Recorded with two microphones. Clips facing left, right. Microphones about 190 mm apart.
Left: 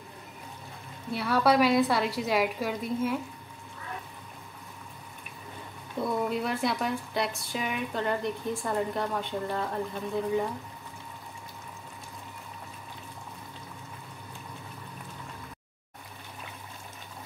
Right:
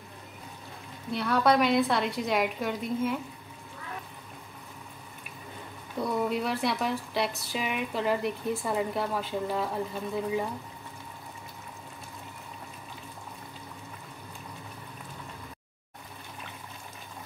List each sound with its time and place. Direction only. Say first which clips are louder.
1.1 s speech: even; 5° left (ahead or behind)
5.9 s speech: even; centre (ahead or behind)